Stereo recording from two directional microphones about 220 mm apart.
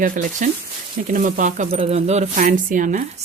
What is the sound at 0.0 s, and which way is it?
Speech, 35° right (ahead or behind).